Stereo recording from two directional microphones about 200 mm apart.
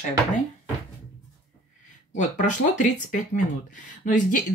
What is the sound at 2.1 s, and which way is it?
Speech, 40° left (ahead or behind).